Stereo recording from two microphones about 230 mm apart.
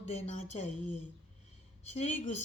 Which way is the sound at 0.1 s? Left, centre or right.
Left.